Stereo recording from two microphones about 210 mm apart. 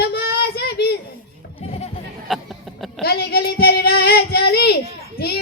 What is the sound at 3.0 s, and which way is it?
Speech, 50° left (ahead or behind).